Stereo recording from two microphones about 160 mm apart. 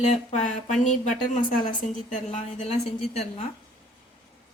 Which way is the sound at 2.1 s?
45° left (ahead or behind).